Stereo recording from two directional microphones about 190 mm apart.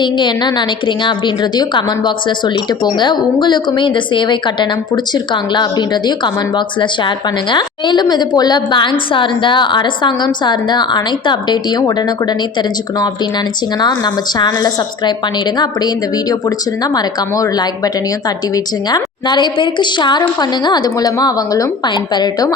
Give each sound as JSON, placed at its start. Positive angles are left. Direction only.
{"t": 0.0, "sound": "a woman's voice", "side_deg": 25}